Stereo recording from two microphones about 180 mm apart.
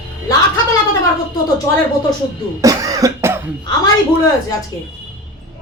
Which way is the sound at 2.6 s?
20° right (ahead or behind).